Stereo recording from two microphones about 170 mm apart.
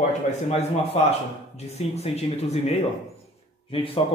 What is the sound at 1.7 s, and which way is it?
Speech, 40° left (ahead or behind).